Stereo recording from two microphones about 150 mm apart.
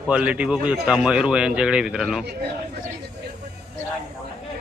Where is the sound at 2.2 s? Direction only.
90° right.